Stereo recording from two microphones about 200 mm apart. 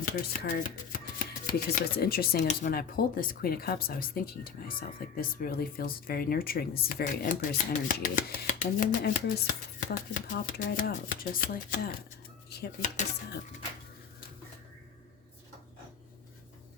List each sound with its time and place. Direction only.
0.0 s speech: 45° left (ahead or behind)
12.5 s dishes: 55° left (ahead or behind)